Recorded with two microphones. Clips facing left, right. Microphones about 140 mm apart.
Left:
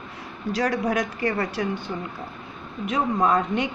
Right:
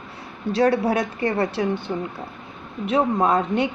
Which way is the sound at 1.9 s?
45° right (ahead or behind).